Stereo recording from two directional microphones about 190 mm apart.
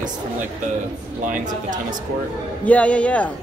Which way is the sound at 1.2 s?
45° right (ahead or behind).